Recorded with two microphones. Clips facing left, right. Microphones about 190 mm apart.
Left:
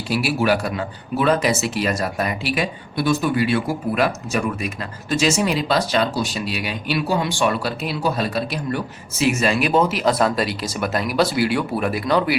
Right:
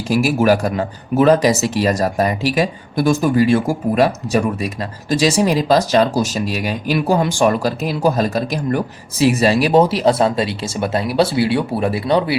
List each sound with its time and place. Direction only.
0.1 s speech: 45° right (ahead or behind); by 12.4 s 30° right (ahead or behind)